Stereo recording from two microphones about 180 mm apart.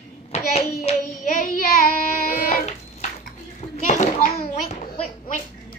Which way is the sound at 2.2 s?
55° left (ahead or behind).